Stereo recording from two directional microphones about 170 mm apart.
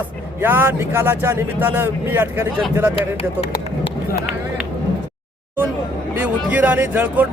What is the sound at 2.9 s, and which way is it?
Speech, 30° left (ahead or behind).